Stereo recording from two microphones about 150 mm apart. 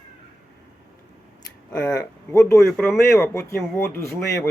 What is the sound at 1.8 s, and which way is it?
Speech, 20° left (ahead or behind).